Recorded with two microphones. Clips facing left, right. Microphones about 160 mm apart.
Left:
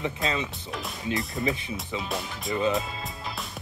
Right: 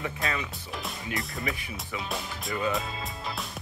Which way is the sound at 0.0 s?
20° left (ahead or behind).